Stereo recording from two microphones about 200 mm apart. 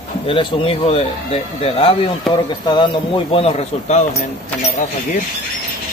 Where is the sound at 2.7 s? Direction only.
25° left (ahead or behind).